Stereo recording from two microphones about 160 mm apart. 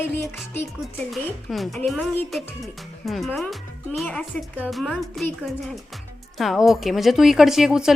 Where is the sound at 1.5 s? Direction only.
Centre (ahead or behind).